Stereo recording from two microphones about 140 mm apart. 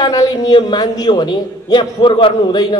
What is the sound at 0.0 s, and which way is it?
A man's voice, 25° left (ahead or behind).